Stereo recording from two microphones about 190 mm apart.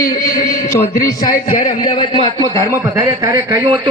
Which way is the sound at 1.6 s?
25° left (ahead or behind).